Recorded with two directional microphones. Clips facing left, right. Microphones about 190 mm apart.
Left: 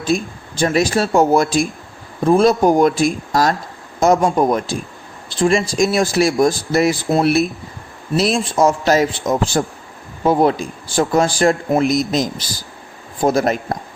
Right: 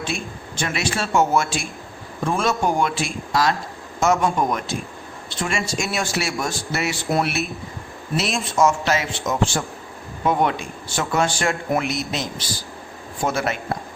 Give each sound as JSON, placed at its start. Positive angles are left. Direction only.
{"t": 0.1, "sound": "a man's voice", "side_deg": 35}